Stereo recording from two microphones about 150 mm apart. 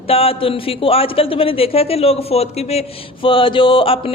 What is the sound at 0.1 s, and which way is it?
A man's voice, 40° left (ahead or behind).